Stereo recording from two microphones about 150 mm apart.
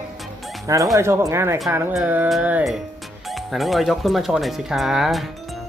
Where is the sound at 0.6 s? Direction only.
20° right (ahead or behind).